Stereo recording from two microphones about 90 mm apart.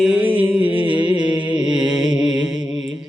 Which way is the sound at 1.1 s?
55° right (ahead or behind).